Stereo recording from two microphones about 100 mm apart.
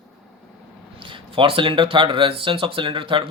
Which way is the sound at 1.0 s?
60° right (ahead or behind).